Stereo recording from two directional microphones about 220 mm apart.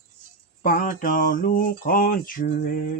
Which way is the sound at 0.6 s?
40° left (ahead or behind).